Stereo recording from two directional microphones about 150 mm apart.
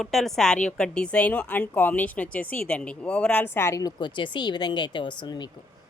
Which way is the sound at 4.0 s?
30° left (ahead or behind).